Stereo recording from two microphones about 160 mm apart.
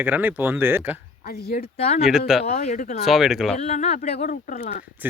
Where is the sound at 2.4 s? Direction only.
45° left (ahead or behind).